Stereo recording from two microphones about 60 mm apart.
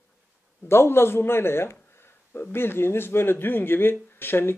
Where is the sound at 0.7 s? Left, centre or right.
Left.